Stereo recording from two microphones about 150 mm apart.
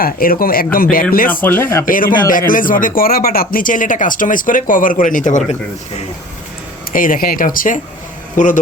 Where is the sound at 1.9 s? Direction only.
70° left (ahead or behind); by 6.0 s 50° left (ahead or behind).